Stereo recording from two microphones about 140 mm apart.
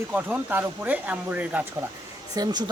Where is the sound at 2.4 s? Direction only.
30° right (ahead or behind).